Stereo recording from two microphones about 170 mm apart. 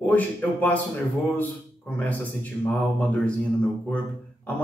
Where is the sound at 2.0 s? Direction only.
10° left (ahead or behind).